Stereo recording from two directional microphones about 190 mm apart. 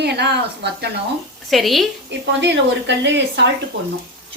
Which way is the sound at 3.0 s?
70° right (ahead or behind).